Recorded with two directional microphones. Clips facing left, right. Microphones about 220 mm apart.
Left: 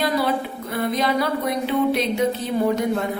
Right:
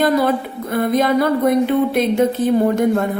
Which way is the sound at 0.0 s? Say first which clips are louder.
Right 6 dB; 50° right (ahead or behind).